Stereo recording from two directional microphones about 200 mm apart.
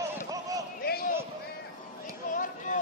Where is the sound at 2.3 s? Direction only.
40° left (ahead or behind).